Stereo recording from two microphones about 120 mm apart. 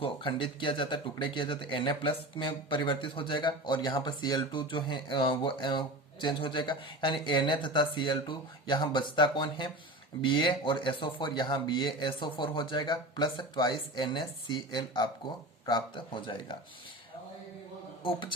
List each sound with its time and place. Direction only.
0.0 s speech: 45° left (ahead or behind)
18.0 s speech: 40° left (ahead or behind)